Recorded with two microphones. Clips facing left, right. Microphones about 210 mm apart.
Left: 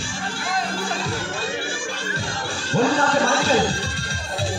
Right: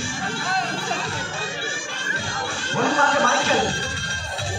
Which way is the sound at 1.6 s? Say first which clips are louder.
Left 4 dB; 35° left (ahead or behind).